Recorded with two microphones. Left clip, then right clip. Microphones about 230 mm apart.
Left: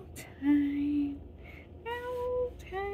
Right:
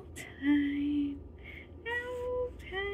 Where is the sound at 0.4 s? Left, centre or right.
Centre.